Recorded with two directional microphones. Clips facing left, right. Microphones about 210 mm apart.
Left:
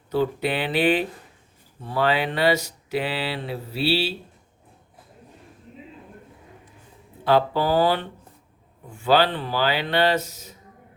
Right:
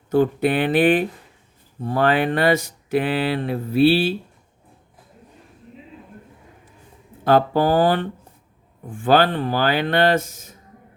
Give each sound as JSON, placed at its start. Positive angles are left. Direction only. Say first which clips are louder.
{"t": 0.1, "sound": "speech", "louder": "right 5 dB", "side_deg": -50}
{"t": 7.3, "sound": "speech", "louder": "right 3 dB", "side_deg": -50}